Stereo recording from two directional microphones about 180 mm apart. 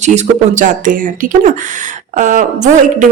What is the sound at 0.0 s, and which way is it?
Speech, 40° right (ahead or behind).